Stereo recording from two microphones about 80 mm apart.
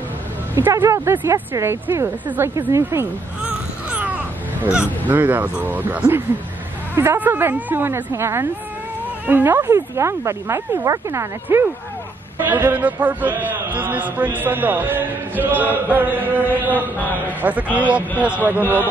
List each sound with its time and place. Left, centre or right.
0.6 s a man's voice: right
3.4 s a sound: centre
5.0 s a man's voice: right